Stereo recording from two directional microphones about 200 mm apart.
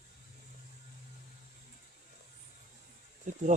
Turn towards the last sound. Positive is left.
turn(degrees=-40)  # may be behind; listen again after turning